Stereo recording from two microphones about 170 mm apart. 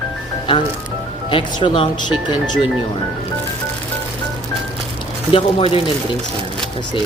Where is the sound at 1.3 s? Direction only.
30° left (ahead or behind).